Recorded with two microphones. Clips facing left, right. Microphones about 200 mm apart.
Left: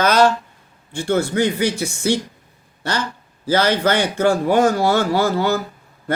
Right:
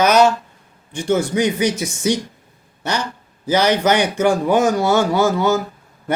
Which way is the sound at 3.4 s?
15° right (ahead or behind).